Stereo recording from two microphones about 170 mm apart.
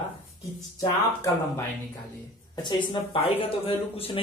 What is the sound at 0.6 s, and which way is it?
Speech, 20° left (ahead or behind).